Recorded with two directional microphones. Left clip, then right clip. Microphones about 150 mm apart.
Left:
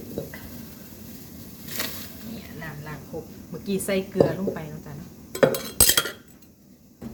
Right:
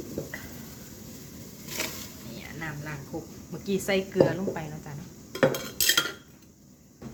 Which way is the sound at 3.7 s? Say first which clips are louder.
Left 1 dB; 5° right (ahead or behind).